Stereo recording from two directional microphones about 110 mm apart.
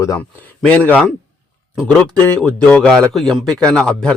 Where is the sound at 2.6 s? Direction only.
10° left (ahead or behind).